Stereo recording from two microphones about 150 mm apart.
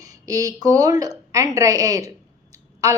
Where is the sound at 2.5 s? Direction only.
20° right (ahead or behind).